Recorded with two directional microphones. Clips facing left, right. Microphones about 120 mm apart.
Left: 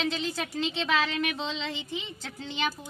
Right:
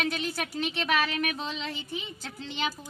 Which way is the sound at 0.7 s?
90° left.